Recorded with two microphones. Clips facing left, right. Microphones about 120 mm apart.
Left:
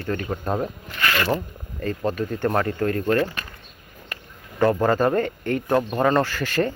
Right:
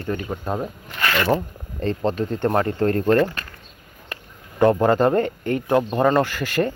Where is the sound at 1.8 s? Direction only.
25° right (ahead or behind).